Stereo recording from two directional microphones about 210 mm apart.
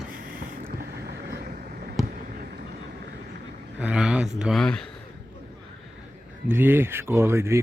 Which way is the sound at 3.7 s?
5° right (ahead or behind).